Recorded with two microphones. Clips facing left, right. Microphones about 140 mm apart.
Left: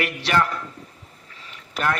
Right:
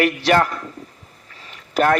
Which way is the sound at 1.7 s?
40° right (ahead or behind).